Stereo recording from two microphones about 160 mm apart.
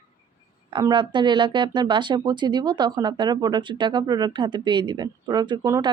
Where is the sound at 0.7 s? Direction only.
30° right (ahead or behind).